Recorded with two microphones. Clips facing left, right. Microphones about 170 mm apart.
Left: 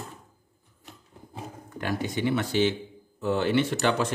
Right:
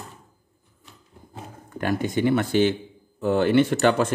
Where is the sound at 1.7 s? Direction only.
50° right (ahead or behind).